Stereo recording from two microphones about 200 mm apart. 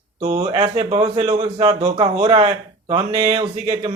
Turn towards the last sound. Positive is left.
turn(degrees=-25)  # may be behind; listen again after turning